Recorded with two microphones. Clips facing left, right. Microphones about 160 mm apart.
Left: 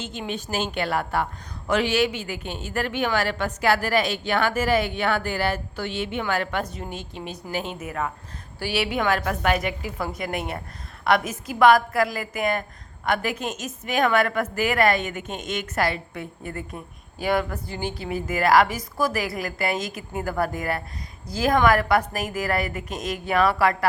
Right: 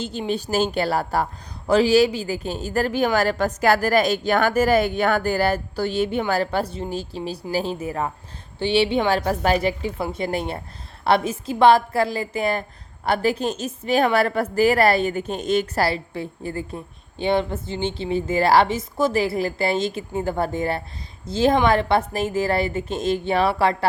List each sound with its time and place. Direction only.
0.0 s a woman's voice: 35° right (ahead or behind)